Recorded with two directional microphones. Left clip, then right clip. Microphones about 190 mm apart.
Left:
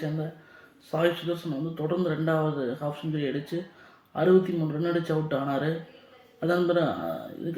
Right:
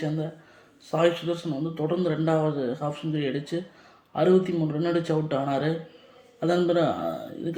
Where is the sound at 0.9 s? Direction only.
20° right (ahead or behind).